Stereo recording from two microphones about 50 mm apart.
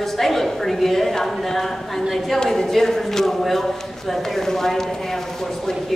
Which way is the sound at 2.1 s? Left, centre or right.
Centre.